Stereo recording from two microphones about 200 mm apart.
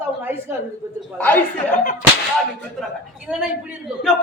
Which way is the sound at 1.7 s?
45° left (ahead or behind).